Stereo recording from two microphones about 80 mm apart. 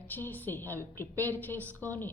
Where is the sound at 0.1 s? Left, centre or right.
Left.